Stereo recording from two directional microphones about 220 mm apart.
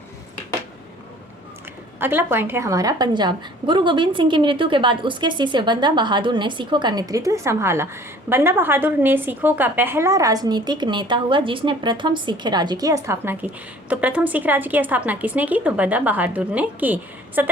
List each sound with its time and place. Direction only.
2.0 s a woman's voice: 10° right (ahead or behind)